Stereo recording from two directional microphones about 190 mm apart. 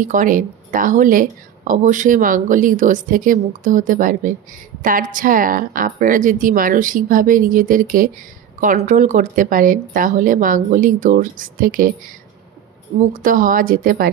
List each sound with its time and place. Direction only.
0.0 s speech: 45° right (ahead or behind)
13.1 s speech: 45° right (ahead or behind)